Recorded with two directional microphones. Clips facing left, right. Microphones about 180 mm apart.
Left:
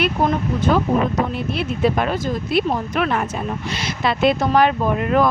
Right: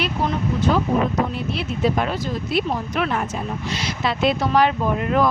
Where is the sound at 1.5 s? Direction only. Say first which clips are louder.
Left 2 dB; 55° left (ahead or behind).